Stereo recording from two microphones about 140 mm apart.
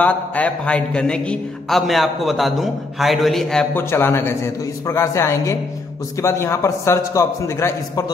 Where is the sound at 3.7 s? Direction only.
15° left (ahead or behind).